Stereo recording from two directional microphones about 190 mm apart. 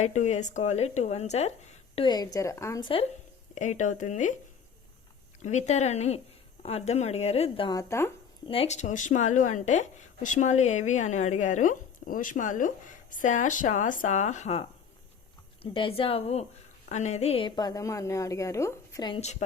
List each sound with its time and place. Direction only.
0.0 s a woman's voice: 40° left (ahead or behind)
2.0 s a woman's voice: 20° left (ahead or behind)
3.5 s a woman's voice: 40° left (ahead or behind)
5.4 s a woman's voice: 35° left (ahead or behind); by 8.1 s 15° left (ahead or behind)
8.4 s a woman's voice: 30° left (ahead or behind)
15.6 s a woman's voice: 30° left (ahead or behind)